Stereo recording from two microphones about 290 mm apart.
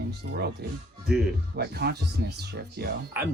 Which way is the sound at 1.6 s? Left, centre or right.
Right.